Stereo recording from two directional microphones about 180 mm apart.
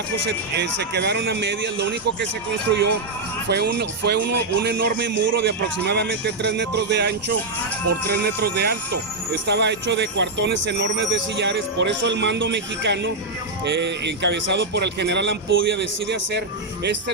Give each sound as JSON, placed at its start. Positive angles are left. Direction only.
{"t": 0.3, "sound": "a man's voice", "side_deg": -75}
{"t": 7.9, "sound": "speech", "side_deg": -60}
{"t": 9.5, "sound": "a man's voice", "side_deg": -75}